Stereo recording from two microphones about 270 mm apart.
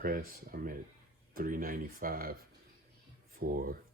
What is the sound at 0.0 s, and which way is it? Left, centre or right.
Speech, right.